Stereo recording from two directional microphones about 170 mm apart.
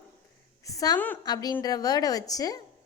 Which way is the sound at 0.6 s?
20° left (ahead or behind).